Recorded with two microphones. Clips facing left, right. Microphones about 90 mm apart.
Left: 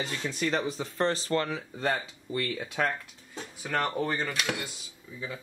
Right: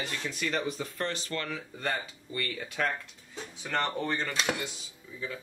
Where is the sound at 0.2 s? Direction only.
25° left (ahead or behind).